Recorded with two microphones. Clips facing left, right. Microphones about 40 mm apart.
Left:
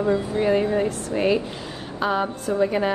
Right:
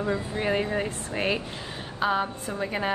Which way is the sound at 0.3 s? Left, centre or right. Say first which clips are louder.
Left 6 dB; right.